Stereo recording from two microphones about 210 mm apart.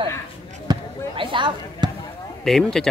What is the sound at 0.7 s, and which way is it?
Basketball bounce, 25° right (ahead or behind).